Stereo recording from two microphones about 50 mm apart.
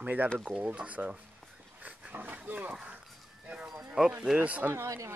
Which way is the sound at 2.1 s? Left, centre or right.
Right.